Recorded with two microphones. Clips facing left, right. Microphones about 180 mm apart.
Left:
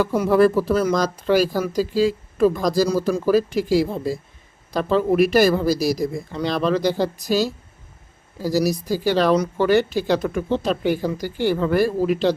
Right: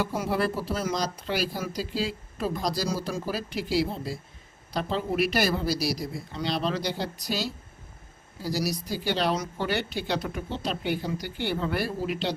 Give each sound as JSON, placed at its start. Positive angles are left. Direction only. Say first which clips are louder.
{"t": 0.2, "sound": "speech", "louder": "left 11 dB", "side_deg": 50}
{"t": 8.5, "sound": "speech", "louder": "left 10 dB", "side_deg": 45}